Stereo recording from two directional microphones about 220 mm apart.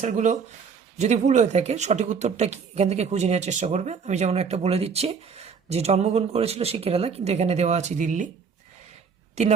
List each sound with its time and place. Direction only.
0.0 s speech: 35° right (ahead or behind)